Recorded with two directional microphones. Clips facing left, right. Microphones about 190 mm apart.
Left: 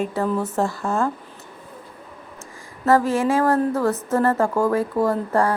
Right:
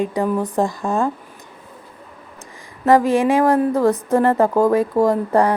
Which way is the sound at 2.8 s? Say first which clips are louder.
Right 4 dB; 15° right (ahead or behind).